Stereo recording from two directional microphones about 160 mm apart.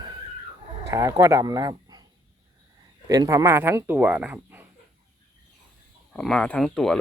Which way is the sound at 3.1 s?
20° right (ahead or behind).